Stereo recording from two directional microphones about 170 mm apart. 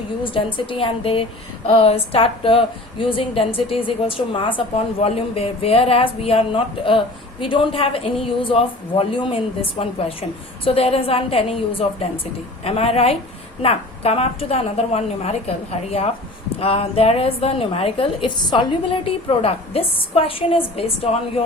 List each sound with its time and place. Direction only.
0.3 s a woman's voice: 30° left (ahead or behind)